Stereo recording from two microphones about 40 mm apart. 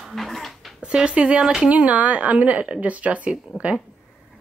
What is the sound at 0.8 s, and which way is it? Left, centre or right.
A woman's voice, right.